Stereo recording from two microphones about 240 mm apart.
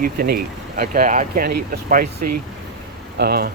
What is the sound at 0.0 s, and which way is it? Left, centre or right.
Speech, right.